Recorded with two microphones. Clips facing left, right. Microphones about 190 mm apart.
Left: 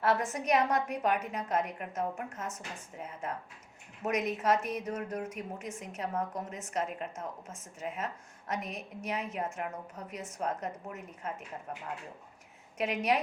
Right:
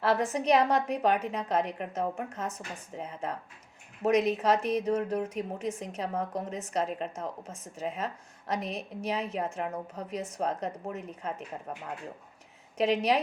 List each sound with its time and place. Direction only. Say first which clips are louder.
0.3 s a woman's voice: right 4 dB; 35° right (ahead or behind)
12.7 s a woman's voice: right 4 dB; 35° right (ahead or behind)